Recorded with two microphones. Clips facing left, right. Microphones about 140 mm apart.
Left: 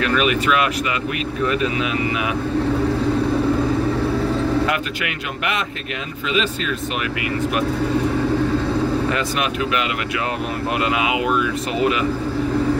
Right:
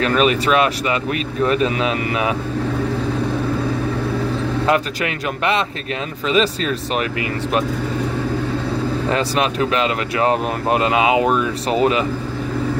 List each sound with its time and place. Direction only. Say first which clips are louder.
0.0 s speech: right 2 dB; 30° right (ahead or behind)
4.6 s speech: right 5 dB; 30° right (ahead or behind)
9.1 s speech: right 3 dB; 30° right (ahead or behind)